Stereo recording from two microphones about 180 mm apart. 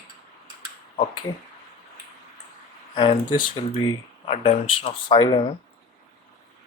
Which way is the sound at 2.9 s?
30° left (ahead or behind).